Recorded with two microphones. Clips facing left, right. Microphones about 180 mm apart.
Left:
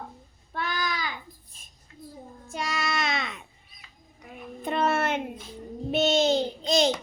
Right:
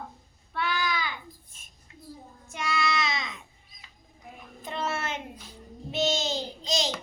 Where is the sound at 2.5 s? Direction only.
40° left (ahead or behind); by 6.9 s 60° left (ahead or behind).